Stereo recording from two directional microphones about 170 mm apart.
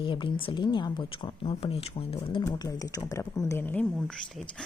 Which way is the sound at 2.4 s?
20° left (ahead or behind).